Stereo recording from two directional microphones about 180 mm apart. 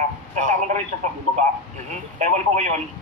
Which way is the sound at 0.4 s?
40° right (ahead or behind).